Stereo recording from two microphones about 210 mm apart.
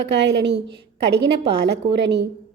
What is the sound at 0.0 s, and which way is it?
A woman's voice, 55° right (ahead or behind).